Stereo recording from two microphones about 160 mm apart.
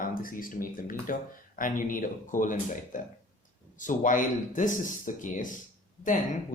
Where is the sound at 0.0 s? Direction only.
60° left (ahead or behind).